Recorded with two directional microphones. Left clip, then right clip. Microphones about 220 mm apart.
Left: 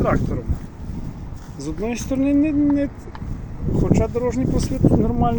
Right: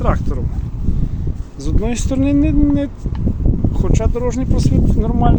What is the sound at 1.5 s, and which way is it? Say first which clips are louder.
Speech: right 3 dB; 15° right (ahead or behind).